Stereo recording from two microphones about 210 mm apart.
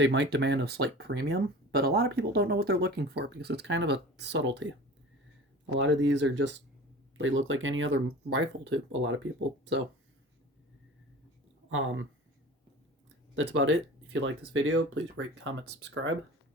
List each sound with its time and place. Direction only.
0.0 s speech: 55° right (ahead or behind)
5.8 s speech: 60° right (ahead or behind)
11.7 s speech: 70° right (ahead or behind)
13.3 s speech: 60° right (ahead or behind)